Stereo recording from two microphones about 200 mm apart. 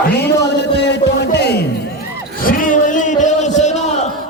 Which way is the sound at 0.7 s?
60° left (ahead or behind).